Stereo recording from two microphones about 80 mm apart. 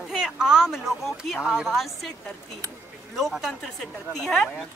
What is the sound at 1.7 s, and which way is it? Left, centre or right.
Speech, centre.